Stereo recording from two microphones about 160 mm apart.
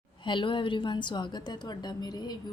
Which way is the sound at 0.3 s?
30° left (ahead or behind).